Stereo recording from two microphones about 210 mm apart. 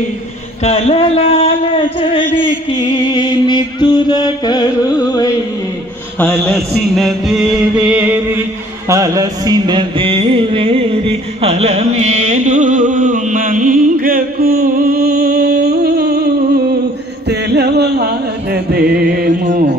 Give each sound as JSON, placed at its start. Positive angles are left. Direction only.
{"t": 0.7, "sound": "music", "side_deg": 30}
{"t": 6.1, "sound": "music", "side_deg": 5}